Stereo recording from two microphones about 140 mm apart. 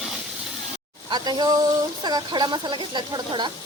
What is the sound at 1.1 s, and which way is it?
Speech, 30° right (ahead or behind).